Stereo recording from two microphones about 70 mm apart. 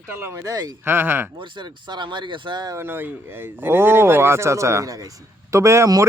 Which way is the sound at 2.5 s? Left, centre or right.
Right.